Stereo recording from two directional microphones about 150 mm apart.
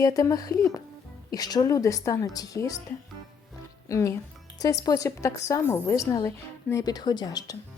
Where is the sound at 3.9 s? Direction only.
20° left (ahead or behind).